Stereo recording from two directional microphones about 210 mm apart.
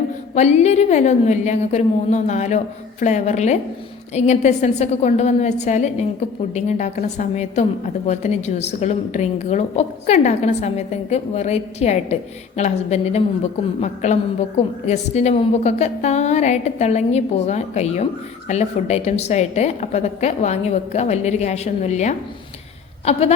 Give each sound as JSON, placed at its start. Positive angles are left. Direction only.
{"t": 0.3, "sound": "a woman's voice", "side_deg": 30}